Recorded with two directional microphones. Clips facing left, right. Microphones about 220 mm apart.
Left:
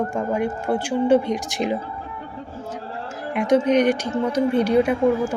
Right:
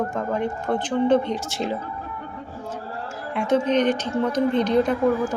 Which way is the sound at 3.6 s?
10° left (ahead or behind).